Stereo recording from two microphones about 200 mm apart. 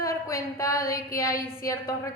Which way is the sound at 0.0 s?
15° left (ahead or behind).